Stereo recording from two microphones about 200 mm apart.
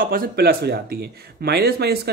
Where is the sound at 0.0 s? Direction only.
45° right (ahead or behind).